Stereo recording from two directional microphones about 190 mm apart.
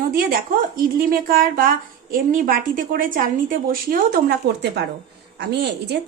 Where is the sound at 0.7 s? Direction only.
50° right (ahead or behind).